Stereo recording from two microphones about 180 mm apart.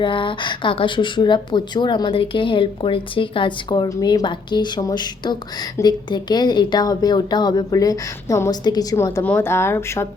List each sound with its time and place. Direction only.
0.0 s speech: 30° left (ahead or behind)